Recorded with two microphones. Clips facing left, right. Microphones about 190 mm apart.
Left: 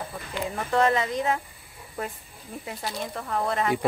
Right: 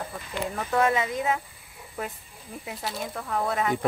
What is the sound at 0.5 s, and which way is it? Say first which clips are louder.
Speech: left 1 dB; 5° right (ahead or behind).